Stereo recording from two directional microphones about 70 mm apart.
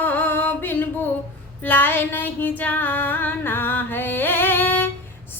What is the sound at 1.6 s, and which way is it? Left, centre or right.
Female singing, left.